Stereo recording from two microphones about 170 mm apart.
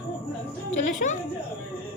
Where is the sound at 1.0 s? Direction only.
55° left (ahead or behind).